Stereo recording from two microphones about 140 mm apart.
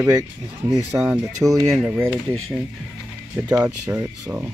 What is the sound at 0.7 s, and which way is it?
Speech, 20° right (ahead or behind).